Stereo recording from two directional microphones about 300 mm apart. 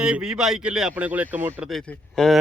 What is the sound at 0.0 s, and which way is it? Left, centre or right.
Speech, centre.